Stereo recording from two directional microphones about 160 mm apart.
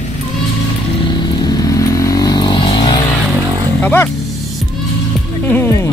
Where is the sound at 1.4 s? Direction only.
25° left (ahead or behind).